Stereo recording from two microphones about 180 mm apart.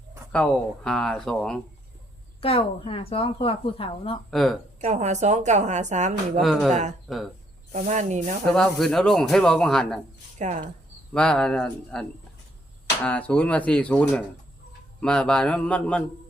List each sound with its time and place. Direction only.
0.3 s speech: 5° left (ahead or behind)
2.4 s a woman's voice: 30° left (ahead or behind)
4.3 s speech: centre (ahead or behind)
4.8 s a woman's voice: 40° right (ahead or behind)
6.4 s speech: centre (ahead or behind)
7.7 s a woman's voice: 40° right (ahead or behind)
8.5 s speech: 5° left (ahead or behind)
10.3 s speech: 40° right (ahead or behind)
11.1 s speech: 5° left (ahead or behind)
13.1 s speech: 10° left (ahead or behind)